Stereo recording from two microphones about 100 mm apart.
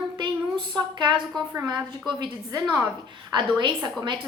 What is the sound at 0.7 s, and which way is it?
A woman's voice, 50° right (ahead or behind).